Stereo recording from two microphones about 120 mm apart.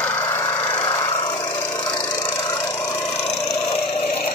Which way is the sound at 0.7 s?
35° left (ahead or behind).